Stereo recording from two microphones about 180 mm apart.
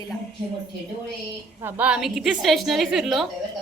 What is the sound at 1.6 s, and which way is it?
A woman's voice, 5° right (ahead or behind).